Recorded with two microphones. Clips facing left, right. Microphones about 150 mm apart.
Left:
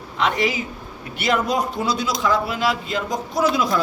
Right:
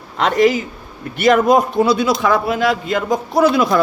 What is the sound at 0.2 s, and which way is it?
A man's voice, 50° right (ahead or behind).